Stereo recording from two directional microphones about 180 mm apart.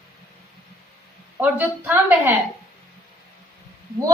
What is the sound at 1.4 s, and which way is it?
Speech, 10° right (ahead or behind).